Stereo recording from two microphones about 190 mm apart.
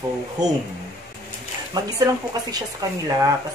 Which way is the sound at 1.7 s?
20° right (ahead or behind).